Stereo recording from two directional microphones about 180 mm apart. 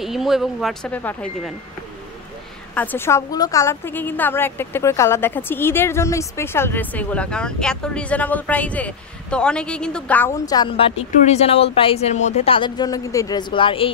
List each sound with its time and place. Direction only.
0.0 s speech: centre (ahead or behind)
2.7 s a woman's voice: 10° left (ahead or behind)
10.4 s speech: 20° left (ahead or behind)
11.0 s speech: 35° left (ahead or behind)